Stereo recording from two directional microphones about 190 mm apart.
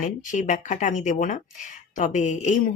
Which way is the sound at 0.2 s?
40° left (ahead or behind).